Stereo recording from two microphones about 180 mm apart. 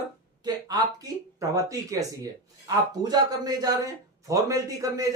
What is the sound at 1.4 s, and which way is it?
A man's voice, 20° right (ahead or behind).